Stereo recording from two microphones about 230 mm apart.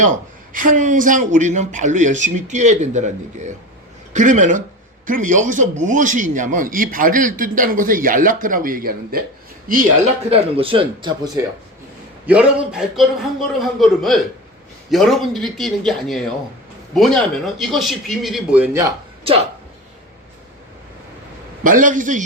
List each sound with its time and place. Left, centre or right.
0.5 s a man's voice: right
12.2 s speech: centre
21.6 s a man's voice: right